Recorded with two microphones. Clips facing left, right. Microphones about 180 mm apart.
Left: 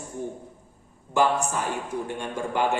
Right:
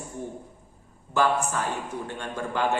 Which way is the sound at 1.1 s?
15° left (ahead or behind).